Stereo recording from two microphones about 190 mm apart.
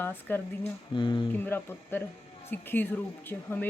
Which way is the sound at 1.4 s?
10° left (ahead or behind).